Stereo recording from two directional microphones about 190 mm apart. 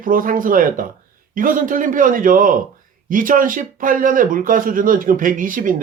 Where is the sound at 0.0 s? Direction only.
45° right (ahead or behind).